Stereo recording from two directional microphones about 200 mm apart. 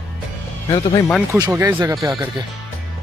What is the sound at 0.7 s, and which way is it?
Speech, 20° left (ahead or behind).